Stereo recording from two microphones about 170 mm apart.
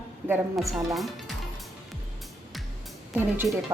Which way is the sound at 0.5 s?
Centre (ahead or behind).